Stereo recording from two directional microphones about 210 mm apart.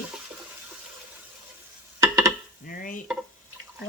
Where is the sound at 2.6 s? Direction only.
40° left (ahead or behind).